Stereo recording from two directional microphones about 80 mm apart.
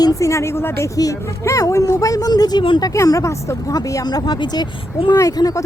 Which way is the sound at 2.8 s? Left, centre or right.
Left.